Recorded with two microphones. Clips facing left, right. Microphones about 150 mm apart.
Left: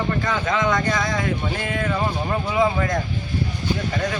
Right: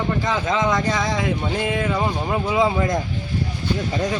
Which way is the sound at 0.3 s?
25° right (ahead or behind).